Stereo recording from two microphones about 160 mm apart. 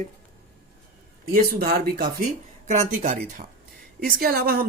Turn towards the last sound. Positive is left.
turn(degrees=-70)  # may be behind; listen again after turning